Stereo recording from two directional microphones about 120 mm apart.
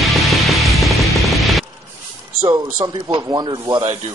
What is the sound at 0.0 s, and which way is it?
Music, centre (ahead or behind).